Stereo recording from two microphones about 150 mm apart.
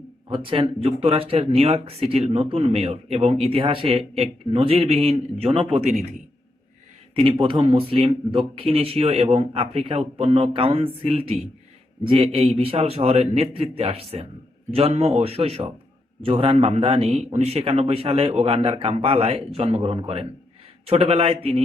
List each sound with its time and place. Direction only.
0.3 s speech: 35° right (ahead or behind); by 6.1 s 50° right (ahead or behind)
7.2 s speech: 35° right (ahead or behind)